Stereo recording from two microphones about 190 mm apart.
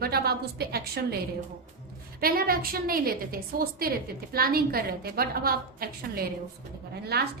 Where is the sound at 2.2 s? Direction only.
50° right (ahead or behind).